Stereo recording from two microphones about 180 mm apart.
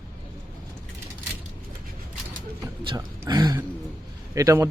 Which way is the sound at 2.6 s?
20° right (ahead or behind).